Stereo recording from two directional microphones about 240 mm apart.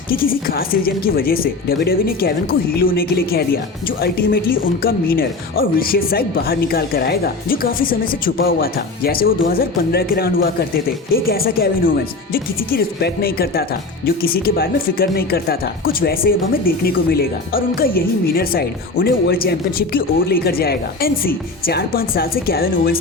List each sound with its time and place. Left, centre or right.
0.1 s speech: left